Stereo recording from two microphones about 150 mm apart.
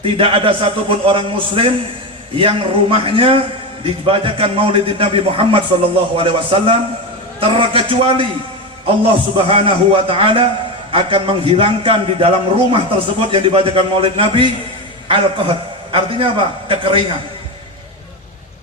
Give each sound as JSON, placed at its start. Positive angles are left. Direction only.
{"t": 0.0, "sound": "a man's voice", "side_deg": -40}